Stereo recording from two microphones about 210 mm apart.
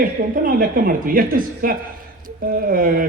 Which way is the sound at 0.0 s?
40° right (ahead or behind).